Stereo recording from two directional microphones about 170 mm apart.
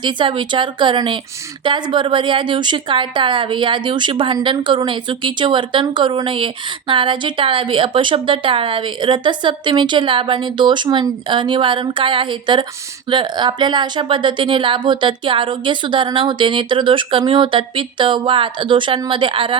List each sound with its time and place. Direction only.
0.0 s a woman's voice: 30° right (ahead or behind)